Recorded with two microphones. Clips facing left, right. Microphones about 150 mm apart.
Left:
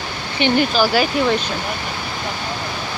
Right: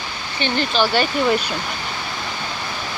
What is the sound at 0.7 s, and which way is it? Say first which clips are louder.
Speech: left 2 dB; 5° left (ahead or behind).